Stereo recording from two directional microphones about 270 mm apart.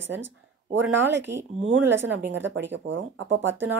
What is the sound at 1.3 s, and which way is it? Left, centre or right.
Speech, right.